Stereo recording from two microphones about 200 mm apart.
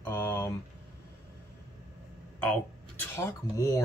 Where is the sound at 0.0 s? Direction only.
10° left (ahead or behind).